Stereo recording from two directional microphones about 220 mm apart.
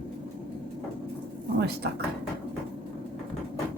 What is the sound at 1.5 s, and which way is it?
Speech, 50° right (ahead or behind).